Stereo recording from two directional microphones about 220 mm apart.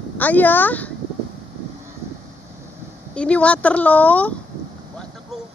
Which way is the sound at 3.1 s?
5° left (ahead or behind).